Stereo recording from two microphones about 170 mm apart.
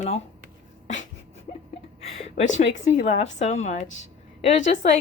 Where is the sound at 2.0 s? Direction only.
40° left (ahead or behind).